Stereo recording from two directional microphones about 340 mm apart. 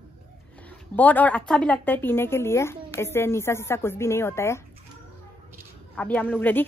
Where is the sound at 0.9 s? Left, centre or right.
Centre.